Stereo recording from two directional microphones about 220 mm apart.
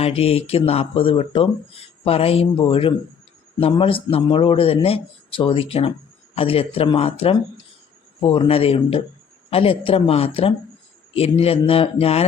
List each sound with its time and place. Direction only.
0.0 s speech: 25° left (ahead or behind)